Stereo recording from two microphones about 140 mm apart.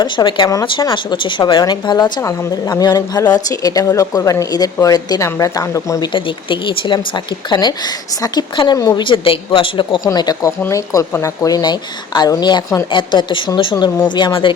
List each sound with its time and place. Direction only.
0.0 s a woman's voice: 35° left (ahead or behind)
6.1 s a woman's voice: 35° left (ahead or behind)
10.1 s a woman's voice: 25° left (ahead or behind)